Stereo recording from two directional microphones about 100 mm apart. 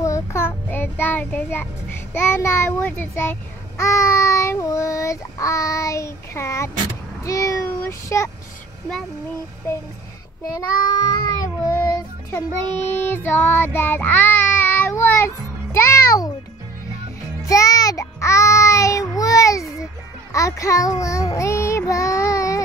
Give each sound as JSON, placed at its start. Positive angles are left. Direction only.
{"t": 0.0, "sound": "child singing", "side_deg": 30}
{"t": 2.1, "sound": "a child's voice", "side_deg": 20}
{"t": 11.2, "sound": "speech", "side_deg": 35}
{"t": 12.7, "sound": "child singing", "side_deg": 20}
{"t": 17.4, "sound": "child singing", "side_deg": 35}